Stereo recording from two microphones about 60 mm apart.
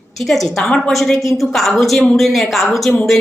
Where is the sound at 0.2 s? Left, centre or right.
Centre.